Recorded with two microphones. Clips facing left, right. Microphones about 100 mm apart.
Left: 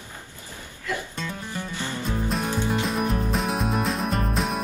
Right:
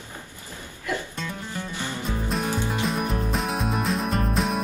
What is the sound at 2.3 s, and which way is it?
Music, centre (ahead or behind).